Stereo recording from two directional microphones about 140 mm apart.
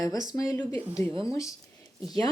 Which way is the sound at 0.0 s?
25° left (ahead or behind).